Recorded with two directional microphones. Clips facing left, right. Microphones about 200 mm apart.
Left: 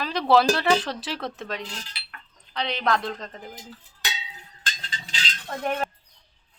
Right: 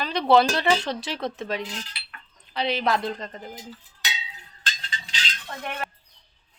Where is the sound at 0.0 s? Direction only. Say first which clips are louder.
Right 1 dB; centre (ahead or behind).